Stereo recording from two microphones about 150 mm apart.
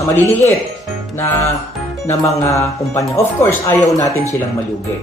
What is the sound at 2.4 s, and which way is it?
A man's voice, 20° left (ahead or behind).